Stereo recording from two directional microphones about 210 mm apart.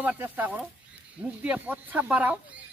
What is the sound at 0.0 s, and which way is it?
Speech, 10° right (ahead or behind).